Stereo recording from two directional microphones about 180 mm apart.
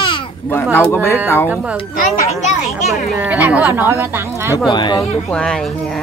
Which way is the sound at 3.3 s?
10° right (ahead or behind).